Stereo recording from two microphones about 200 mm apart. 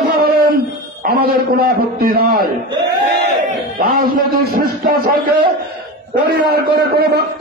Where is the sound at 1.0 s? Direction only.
50° right (ahead or behind).